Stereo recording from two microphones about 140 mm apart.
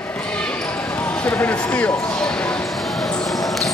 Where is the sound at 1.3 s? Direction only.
10° left (ahead or behind).